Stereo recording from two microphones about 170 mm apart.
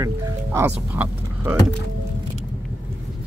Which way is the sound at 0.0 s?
15° right (ahead or behind).